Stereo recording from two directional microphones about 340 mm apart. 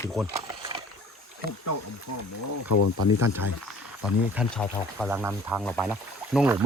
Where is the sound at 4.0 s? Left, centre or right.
Centre.